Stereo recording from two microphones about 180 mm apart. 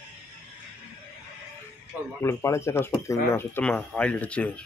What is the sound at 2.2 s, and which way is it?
Speech, 15° left (ahead or behind).